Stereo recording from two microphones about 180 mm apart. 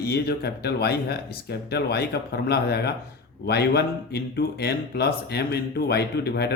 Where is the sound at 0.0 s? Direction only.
65° left (ahead or behind).